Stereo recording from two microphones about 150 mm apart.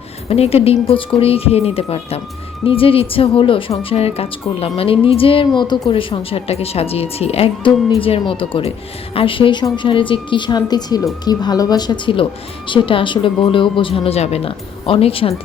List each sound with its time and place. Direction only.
0.3 s a woman's voice: 40° left (ahead or behind)